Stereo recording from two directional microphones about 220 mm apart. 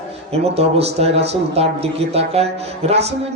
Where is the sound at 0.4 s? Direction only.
30° right (ahead or behind).